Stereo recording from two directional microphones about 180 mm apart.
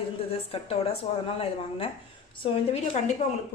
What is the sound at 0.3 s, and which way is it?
A woman's voice, 35° left (ahead or behind).